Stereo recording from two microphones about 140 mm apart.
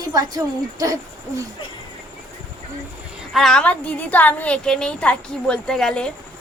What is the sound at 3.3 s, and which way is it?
A woman's voice, centre (ahead or behind).